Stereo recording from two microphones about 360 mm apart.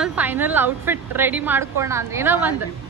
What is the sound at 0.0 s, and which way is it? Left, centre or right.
A woman's voice, centre.